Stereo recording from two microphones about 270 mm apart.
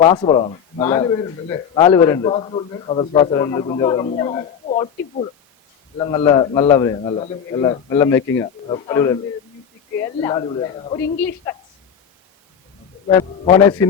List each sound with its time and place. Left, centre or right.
0.0 s a man's voice: left
6.0 s a man's voice: centre
13.1 s a man's voice: centre